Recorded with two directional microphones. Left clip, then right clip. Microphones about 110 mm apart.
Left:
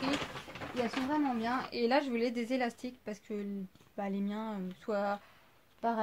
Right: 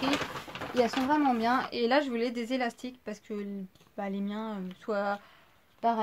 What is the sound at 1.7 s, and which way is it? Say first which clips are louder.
Speech: right 3 dB; 30° right (ahead or behind).